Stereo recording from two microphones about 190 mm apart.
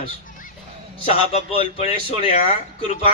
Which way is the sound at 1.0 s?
30° left (ahead or behind).